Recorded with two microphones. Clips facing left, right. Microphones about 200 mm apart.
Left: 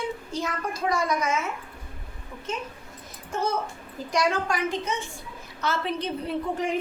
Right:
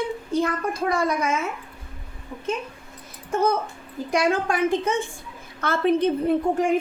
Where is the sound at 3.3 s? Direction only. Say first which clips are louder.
Right 5 dB; 55° right (ahead or behind).